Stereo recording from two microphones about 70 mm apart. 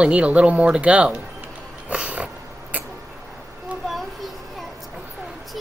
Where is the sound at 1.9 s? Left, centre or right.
Centre.